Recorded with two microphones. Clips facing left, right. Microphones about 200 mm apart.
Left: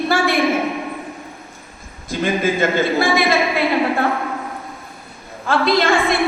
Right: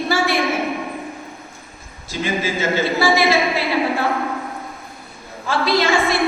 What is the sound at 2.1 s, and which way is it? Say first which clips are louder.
A man's voice: left 4 dB; 55° left (ahead or behind).